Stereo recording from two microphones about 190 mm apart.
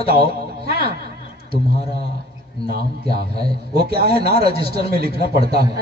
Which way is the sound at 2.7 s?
55° right (ahead or behind).